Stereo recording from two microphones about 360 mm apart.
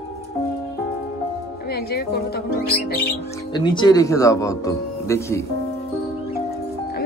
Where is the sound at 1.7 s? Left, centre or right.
Left.